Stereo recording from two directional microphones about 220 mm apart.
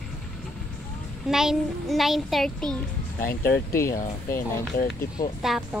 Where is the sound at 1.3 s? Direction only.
Centre (ahead or behind).